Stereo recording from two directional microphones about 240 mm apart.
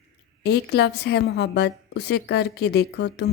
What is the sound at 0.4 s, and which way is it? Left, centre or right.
A woman's voice, left.